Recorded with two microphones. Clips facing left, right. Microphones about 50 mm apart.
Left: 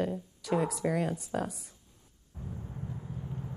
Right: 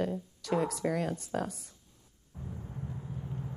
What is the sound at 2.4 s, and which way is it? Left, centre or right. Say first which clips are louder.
Vehicle: even; centre.